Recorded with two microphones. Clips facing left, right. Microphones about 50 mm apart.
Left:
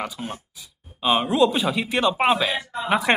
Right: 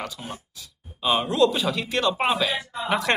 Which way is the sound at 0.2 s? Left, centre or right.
Centre.